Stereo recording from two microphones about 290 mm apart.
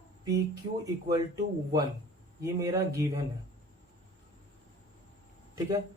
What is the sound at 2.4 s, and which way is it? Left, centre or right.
Speech, centre.